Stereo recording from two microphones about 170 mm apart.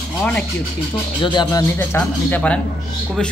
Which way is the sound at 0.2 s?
5° left (ahead or behind).